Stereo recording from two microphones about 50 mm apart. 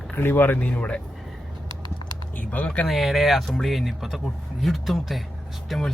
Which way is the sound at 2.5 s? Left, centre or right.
Left.